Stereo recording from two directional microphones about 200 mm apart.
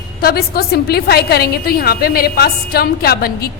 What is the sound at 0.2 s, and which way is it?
A woman's voice, 50° left (ahead or behind).